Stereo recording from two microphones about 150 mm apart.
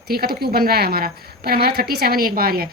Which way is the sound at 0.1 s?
85° right.